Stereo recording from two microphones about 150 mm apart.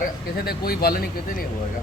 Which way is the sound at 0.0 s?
90° left.